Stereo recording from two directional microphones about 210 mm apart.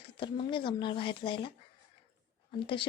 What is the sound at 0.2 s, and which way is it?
Speech, 25° left (ahead or behind).